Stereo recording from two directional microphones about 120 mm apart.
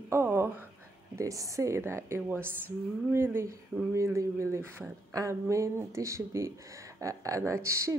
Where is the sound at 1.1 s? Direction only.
25° right (ahead or behind).